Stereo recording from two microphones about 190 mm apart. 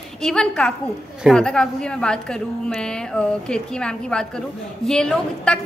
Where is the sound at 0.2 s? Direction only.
5° left (ahead or behind).